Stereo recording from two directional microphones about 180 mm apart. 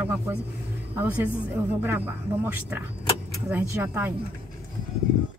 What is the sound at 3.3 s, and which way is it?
Speech, 15° right (ahead or behind).